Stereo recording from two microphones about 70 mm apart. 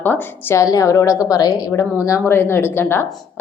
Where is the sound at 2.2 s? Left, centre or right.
Left.